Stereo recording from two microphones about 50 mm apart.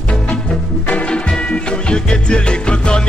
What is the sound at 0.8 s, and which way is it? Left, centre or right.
Music, left.